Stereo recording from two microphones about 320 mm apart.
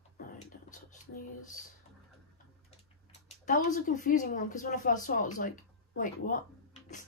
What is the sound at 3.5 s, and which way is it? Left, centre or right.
A woman's voice, left.